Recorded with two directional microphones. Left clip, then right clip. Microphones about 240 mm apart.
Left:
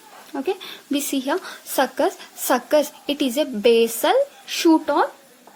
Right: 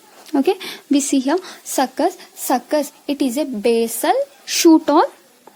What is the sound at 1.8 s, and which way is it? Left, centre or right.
Speech, right.